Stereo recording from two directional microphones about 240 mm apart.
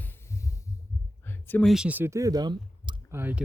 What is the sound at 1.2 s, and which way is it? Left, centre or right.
Speech, centre.